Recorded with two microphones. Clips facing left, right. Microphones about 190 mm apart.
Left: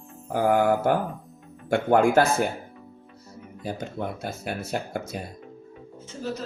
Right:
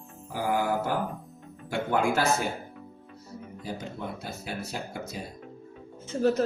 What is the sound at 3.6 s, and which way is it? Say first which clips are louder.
Speech: left 5 dB; 55° left (ahead or behind).